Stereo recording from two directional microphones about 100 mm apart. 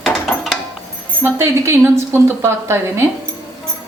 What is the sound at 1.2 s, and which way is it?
A woman's voice, 25° right (ahead or behind).